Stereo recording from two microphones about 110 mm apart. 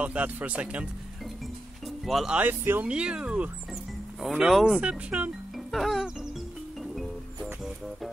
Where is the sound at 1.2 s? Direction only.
Centre (ahead or behind).